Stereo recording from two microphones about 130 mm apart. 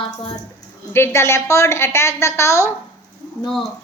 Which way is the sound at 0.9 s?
20° left (ahead or behind).